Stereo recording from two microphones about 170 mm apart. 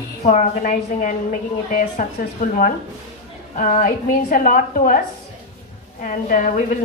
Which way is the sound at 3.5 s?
50° left (ahead or behind).